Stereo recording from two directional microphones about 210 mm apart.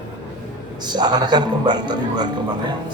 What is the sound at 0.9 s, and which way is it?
A man's voice, 20° right (ahead or behind).